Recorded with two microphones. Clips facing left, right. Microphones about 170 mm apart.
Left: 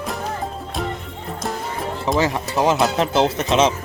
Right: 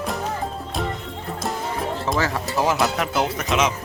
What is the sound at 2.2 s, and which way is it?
Speech, 20° left (ahead or behind).